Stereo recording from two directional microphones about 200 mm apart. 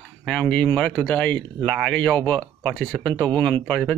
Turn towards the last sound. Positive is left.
turn(degrees=5)  # may be behind; listen again after turning